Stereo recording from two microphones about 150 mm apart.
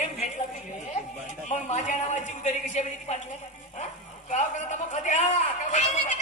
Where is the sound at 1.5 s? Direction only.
50° left (ahead or behind).